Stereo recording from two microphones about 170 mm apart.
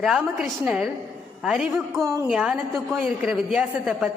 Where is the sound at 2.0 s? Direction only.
15° right (ahead or behind).